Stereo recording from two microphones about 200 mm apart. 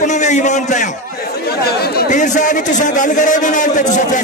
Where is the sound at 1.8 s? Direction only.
50° left (ahead or behind).